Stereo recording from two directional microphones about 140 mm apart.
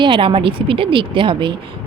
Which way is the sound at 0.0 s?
35° right (ahead or behind).